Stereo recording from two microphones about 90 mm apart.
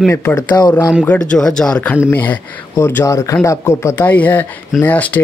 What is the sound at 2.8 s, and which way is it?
Speech, 30° left (ahead or behind).